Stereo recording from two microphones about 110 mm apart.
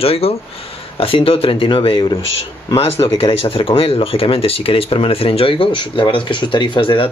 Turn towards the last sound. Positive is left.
turn(degrees=50)  # may be behind; listen again after turning